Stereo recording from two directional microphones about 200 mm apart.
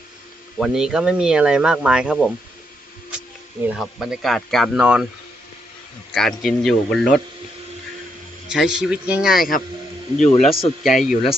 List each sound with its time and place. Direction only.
0.6 s speech: 5° right (ahead or behind)
3.7 s speech: centre (ahead or behind)
6.1 s speech: centre (ahead or behind)
8.4 s speech: 5° right (ahead or behind)
10.2 s speech: 30° left (ahead or behind)
10.8 s speech: centre (ahead or behind)